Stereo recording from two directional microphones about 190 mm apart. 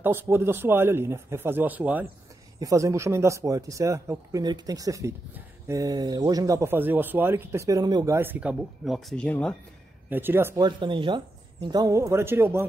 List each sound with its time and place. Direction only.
0.0 s speech: 10° right (ahead or behind); by 9.6 s 5° left (ahead or behind)
10.0 s speech: 10° right (ahead or behind)